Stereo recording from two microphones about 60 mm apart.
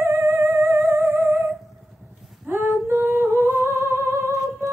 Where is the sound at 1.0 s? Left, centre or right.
Right.